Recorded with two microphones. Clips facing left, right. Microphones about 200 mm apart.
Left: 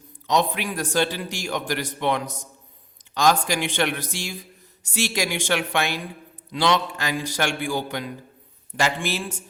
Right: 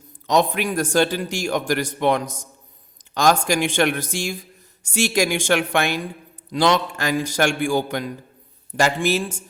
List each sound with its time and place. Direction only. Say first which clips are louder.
0.3 s a man's voice: right 4 dB; 45° right (ahead or behind)